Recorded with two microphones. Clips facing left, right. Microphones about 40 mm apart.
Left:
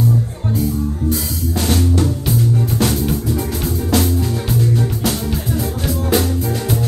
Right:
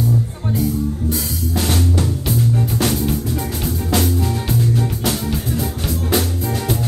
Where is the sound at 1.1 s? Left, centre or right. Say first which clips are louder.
Left 1 dB; centre.